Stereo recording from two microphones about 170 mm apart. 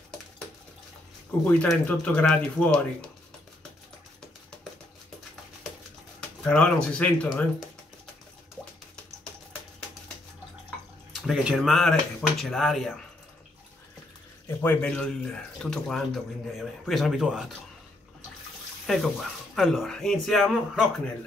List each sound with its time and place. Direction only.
1.4 s speech: 5° left (ahead or behind)
6.4 s speech: 5° left (ahead or behind)
11.1 s speech: 5° right (ahead or behind)
14.6 s speech: 10° left (ahead or behind)
18.9 s speech: centre (ahead or behind)